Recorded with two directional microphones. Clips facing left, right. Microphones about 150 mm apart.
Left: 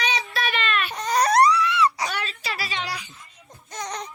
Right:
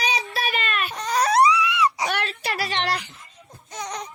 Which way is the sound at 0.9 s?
Centre (ahead or behind).